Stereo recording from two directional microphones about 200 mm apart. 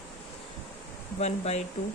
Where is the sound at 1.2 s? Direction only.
35° left (ahead or behind).